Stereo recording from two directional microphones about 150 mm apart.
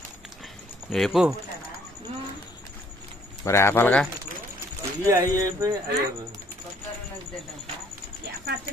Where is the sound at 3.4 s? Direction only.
15° left (ahead or behind).